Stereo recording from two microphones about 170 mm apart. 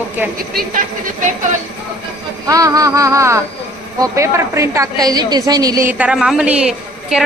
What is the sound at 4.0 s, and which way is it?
A woman's voice, 15° right (ahead or behind).